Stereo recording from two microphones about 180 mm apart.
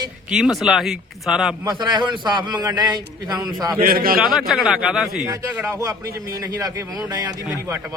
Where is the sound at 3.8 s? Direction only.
55° right (ahead or behind).